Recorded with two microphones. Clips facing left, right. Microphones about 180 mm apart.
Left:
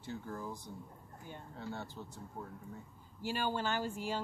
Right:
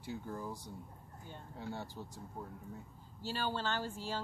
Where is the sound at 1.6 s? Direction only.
15° right (ahead or behind).